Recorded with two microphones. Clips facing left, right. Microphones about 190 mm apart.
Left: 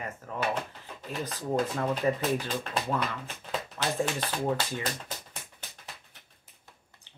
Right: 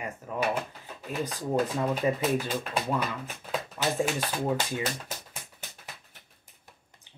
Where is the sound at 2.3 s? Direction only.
10° right (ahead or behind).